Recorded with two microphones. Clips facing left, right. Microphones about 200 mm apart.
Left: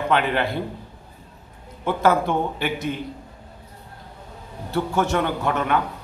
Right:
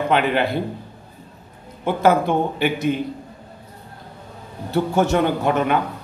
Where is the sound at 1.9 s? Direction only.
15° right (ahead or behind).